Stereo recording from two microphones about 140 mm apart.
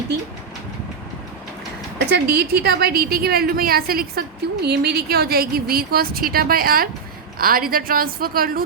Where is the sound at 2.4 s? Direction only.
90° right.